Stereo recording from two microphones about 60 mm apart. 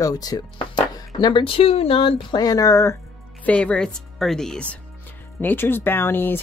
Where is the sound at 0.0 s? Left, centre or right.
Left.